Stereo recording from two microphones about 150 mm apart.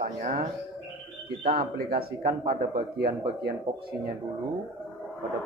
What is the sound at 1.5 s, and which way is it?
Speech, 90° right.